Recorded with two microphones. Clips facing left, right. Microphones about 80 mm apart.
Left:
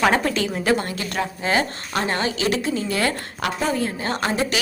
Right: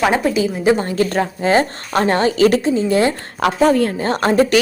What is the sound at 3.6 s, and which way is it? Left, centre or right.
Speech, right.